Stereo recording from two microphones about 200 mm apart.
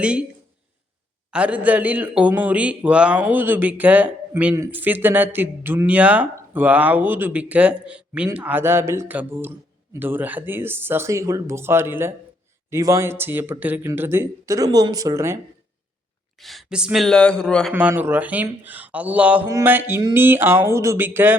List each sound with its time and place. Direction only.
0.0 s speech: 5° right (ahead or behind)
1.3 s a man's voice: 5° right (ahead or behind)
16.4 s a man's voice: centre (ahead or behind)